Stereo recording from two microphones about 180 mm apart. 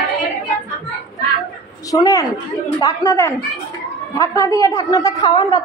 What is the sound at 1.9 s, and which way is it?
A woman's voice, 20° left (ahead or behind).